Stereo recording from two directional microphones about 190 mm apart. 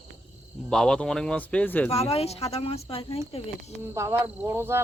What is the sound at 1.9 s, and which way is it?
Speech, 35° left (ahead or behind).